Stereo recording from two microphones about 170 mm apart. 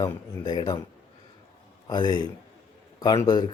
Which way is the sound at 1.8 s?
25° left (ahead or behind).